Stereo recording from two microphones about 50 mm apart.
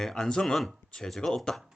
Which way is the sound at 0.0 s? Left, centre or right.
Centre.